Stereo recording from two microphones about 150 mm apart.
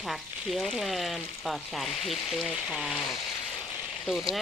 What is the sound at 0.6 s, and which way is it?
Speech, centre (ahead or behind).